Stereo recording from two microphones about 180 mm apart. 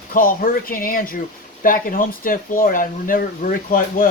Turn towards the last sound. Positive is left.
turn(degrees=50)  # may be behind; listen again after turning